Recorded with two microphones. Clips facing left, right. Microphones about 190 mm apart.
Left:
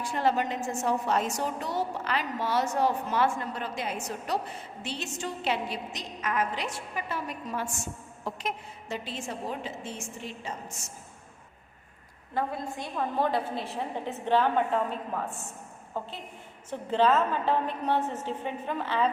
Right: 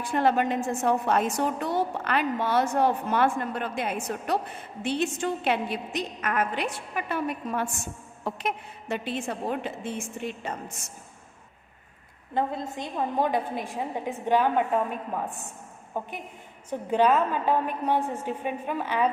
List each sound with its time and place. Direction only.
0.0 s a woman's voice: 55° right (ahead or behind)
12.3 s a woman's voice: 20° right (ahead or behind)